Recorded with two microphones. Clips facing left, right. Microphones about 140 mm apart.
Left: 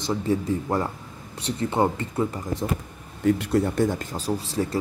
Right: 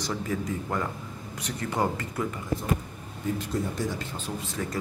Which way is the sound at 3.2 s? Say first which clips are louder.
Left 8 dB; 70° left (ahead or behind).